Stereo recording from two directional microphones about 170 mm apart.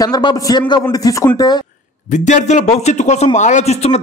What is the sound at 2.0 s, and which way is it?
A man's voice, 45° left (ahead or behind).